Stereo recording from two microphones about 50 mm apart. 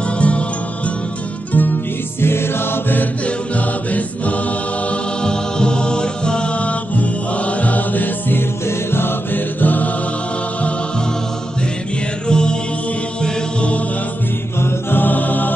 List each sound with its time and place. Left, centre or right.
0.2 s music: left
2.2 s music: left
5.2 s music: centre; by 8.4 s left
8.6 s music: left
12.3 s music: centre
13.2 s mantra: left
14.6 s music: left